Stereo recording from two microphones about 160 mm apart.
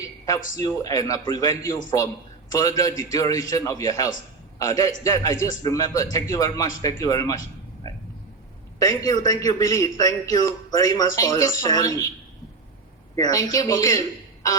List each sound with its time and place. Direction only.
0.0 s a sound: 20° left (ahead or behind)
0.5 s a man's voice: 20° left (ahead or behind)
8.8 s a man's voice: 20° left (ahead or behind)
13.1 s a man's voice: 25° left (ahead or behind)